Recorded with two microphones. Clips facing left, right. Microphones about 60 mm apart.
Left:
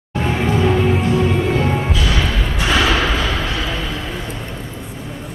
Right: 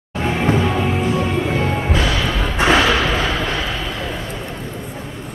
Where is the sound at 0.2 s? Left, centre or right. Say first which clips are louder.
Even; centre.